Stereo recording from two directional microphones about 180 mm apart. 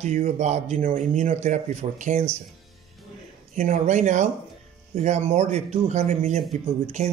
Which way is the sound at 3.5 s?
45° right (ahead or behind).